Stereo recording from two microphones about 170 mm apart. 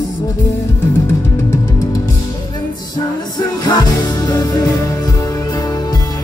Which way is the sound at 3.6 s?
25° left (ahead or behind).